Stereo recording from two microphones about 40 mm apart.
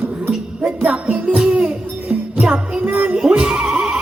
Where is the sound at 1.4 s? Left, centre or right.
Right.